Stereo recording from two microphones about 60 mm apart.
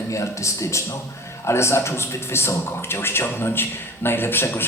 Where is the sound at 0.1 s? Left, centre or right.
Left.